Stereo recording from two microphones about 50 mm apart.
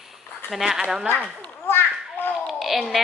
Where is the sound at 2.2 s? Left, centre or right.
Left.